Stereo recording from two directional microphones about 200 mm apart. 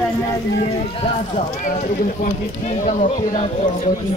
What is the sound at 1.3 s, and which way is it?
Speech, 40° left (ahead or behind).